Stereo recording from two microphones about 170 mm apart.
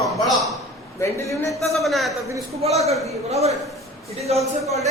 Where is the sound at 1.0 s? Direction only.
15° left (ahead or behind).